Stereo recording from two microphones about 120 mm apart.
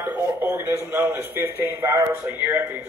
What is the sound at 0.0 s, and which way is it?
A man's voice, 15° right (ahead or behind).